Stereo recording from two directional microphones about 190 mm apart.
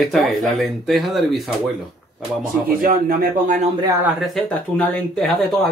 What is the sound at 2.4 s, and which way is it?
Speech, 50° right (ahead or behind).